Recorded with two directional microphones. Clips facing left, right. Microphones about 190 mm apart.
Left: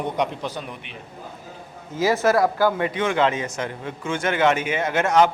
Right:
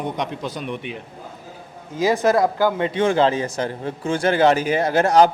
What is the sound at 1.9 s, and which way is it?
Speech, 15° right (ahead or behind).